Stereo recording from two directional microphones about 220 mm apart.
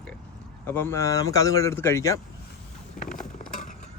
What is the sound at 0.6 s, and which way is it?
A man's voice, 10° left (ahead or behind).